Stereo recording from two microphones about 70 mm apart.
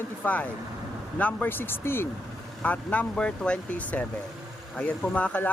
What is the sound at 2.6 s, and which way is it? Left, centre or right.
Speech, left.